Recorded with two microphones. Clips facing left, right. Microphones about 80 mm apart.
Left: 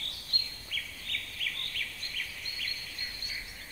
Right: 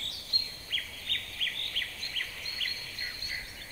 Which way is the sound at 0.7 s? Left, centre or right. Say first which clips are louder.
Right 1 dB; right.